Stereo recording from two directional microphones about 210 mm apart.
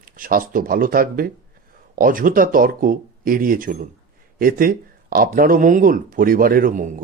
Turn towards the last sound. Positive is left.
turn(degrees=-40)  # may be behind; listen again after turning